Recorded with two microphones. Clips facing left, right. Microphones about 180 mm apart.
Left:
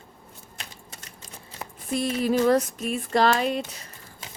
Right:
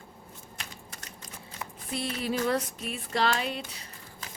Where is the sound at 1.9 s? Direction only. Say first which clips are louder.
Left 8 dB; 45° left (ahead or behind).